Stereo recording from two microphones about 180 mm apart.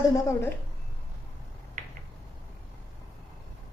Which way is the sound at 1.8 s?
45° right (ahead or behind).